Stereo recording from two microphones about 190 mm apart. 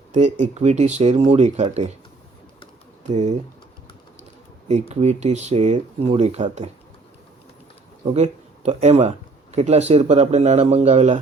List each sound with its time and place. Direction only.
0.1 s speech: 40° right (ahead or behind)
3.0 s speech: 40° right (ahead or behind)
4.7 s speech: 35° right (ahead or behind)
8.1 s speech: 35° right (ahead or behind)